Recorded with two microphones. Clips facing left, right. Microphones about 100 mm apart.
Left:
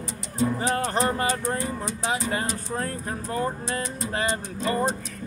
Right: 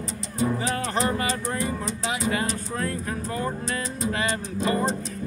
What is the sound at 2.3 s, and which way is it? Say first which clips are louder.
Music: right 1 dB; 35° left (ahead or behind).